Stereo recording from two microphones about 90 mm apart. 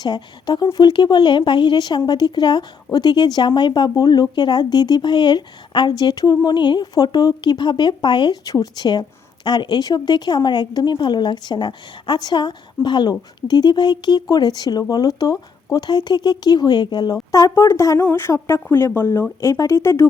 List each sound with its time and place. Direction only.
0.0 s speech: 55° left (ahead or behind)
17.5 s speech: 35° left (ahead or behind)